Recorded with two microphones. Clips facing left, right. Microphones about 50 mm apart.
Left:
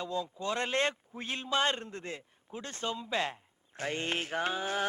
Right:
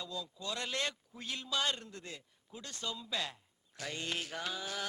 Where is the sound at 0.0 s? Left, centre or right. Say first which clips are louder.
Left 8 dB; left.